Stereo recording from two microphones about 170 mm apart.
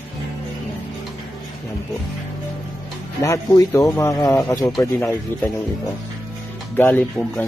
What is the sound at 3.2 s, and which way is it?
Speech, 20° left (ahead or behind).